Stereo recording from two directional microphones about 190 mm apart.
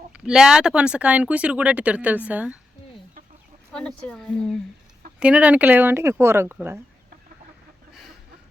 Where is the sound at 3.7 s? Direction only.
5° left (ahead or behind).